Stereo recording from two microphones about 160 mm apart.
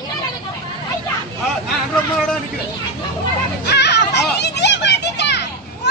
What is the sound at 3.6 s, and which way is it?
Children playing, 90° left.